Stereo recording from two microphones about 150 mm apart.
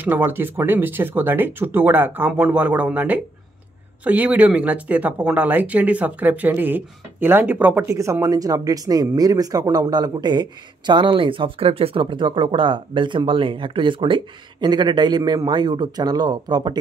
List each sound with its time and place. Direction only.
0.0 s speech: 15° right (ahead or behind)